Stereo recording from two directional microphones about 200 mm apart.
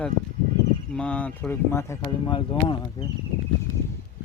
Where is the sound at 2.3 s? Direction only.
25° left (ahead or behind).